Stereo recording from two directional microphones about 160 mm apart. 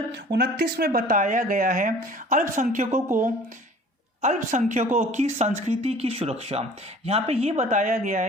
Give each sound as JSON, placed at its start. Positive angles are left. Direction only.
{"t": 0.3, "sound": "speech", "side_deg": -80}
{"t": 4.2, "sound": "a woman's voice", "side_deg": -50}